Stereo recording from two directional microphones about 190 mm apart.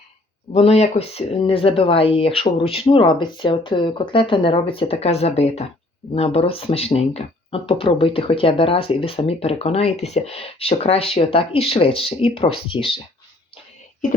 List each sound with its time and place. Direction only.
0.5 s speech: 35° left (ahead or behind)